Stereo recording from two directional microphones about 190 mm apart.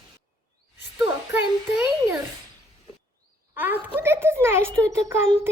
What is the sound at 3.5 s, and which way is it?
A child's voice, 10° right (ahead or behind).